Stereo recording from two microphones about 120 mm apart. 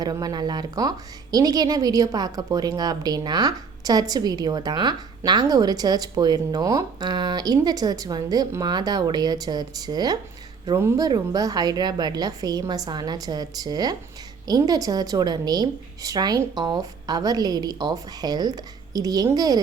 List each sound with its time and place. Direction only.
0.0 s a woman's voice: 35° right (ahead or behind)